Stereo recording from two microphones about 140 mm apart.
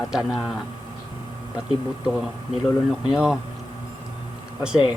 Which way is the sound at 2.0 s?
Centre (ahead or behind).